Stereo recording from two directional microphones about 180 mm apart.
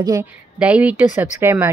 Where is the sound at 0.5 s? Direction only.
5° right (ahead or behind).